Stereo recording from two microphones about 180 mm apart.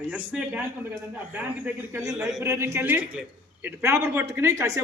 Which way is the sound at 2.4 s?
15° right (ahead or behind).